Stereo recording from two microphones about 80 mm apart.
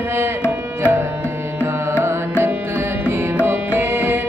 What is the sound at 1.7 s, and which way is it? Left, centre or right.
Music, right.